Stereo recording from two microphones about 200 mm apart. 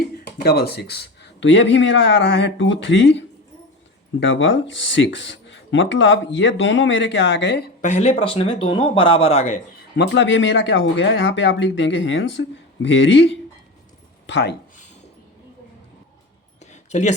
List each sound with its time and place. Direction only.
0.4 s speech: 50° left (ahead or behind)
7.8 s speech: 35° left (ahead or behind)
10.0 s speech: 60° left (ahead or behind)
16.9 s speech: 35° left (ahead or behind)